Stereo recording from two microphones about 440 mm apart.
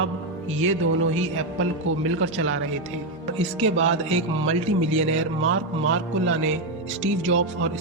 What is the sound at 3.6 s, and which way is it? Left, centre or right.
Speech, right.